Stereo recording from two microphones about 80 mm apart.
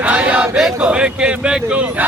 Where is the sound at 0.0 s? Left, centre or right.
Centre.